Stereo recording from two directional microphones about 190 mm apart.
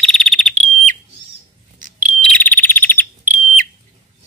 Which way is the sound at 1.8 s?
45° right (ahead or behind).